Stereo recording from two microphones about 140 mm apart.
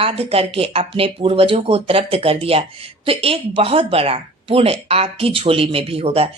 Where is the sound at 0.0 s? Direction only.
45° right (ahead or behind).